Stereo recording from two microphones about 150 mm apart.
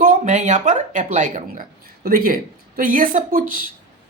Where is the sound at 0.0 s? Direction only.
60° right (ahead or behind).